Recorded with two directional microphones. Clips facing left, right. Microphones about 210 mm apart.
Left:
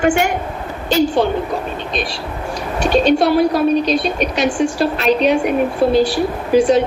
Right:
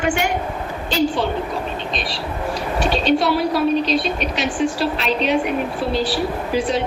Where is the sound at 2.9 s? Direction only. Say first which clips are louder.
Left 6 dB; 45° left (ahead or behind).